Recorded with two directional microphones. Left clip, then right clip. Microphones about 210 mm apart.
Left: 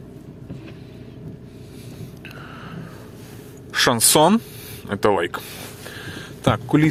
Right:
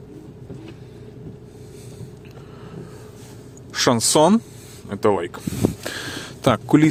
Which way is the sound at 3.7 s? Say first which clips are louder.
Left 1 dB; 10° right (ahead or behind).